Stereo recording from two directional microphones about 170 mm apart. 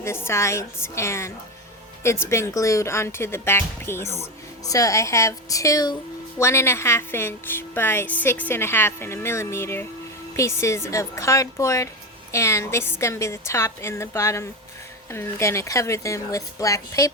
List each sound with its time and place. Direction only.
0.0 s speech: 15° left (ahead or behind)